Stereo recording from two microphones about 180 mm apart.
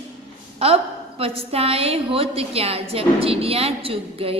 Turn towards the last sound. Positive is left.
turn(degrees=-30)  # may be behind; listen again after turning